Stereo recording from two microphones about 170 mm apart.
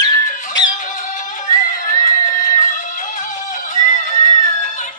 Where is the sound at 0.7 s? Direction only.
50° left (ahead or behind).